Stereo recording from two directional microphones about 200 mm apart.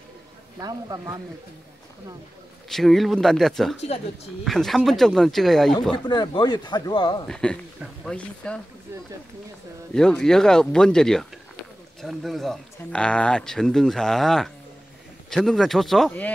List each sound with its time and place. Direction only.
0.6 s speech: 20° right (ahead or behind)
2.7 s speech: centre (ahead or behind)
6.0 s speech: 20° left (ahead or behind)
7.2 s speech: 5° left (ahead or behind)
9.9 s speech: 5° left (ahead or behind)